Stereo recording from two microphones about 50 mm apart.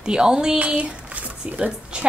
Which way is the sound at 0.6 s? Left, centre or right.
Right.